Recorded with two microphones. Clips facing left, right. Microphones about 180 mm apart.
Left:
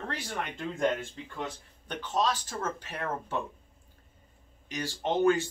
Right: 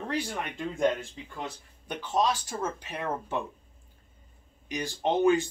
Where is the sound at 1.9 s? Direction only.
10° right (ahead or behind).